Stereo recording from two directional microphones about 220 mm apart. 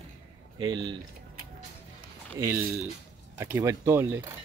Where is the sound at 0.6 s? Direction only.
20° right (ahead or behind).